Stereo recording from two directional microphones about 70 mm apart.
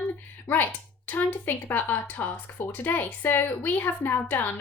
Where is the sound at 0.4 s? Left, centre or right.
Left.